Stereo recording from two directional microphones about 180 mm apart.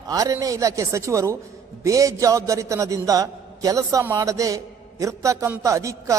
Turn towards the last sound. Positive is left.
turn(degrees=-15)  # may be behind; listen again after turning